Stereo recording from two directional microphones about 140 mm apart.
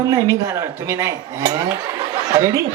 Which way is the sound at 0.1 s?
25° right (ahead or behind).